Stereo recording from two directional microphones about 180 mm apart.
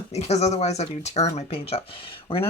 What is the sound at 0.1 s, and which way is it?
Speech, 35° left (ahead or behind).